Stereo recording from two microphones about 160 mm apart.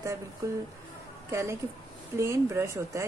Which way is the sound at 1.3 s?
20° right (ahead or behind).